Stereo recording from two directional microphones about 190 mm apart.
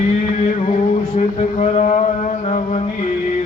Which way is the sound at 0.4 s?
40° left (ahead or behind).